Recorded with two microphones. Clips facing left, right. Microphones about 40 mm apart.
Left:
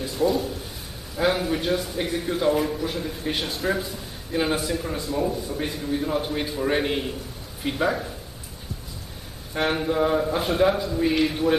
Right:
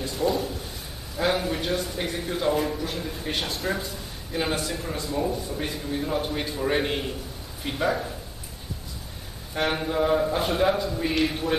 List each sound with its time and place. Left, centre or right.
0.0 s a sound: centre
1.1 s a man's voice: centre
9.5 s a man's voice: centre